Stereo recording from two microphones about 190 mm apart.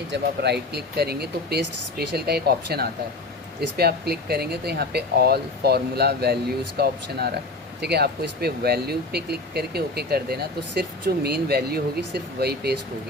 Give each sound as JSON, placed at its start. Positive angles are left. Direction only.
{"t": 0.1, "sound": "speech", "side_deg": -60}